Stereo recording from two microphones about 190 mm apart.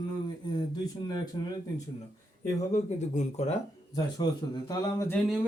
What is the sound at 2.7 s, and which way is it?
Speech, 35° left (ahead or behind).